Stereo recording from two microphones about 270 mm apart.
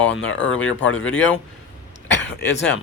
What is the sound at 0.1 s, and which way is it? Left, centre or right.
Speech, left.